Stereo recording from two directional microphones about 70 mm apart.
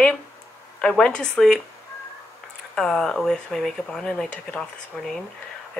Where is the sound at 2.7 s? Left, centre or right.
Centre.